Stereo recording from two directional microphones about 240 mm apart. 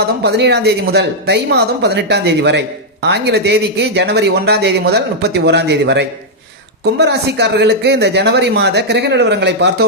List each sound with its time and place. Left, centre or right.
0.2 s speech: right